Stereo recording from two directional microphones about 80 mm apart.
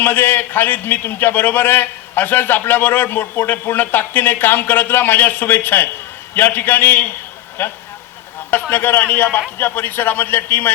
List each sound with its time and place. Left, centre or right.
0.0 s a man's voice: left